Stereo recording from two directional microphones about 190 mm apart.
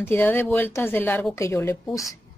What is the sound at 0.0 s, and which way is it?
A woman's voice, 10° left (ahead or behind).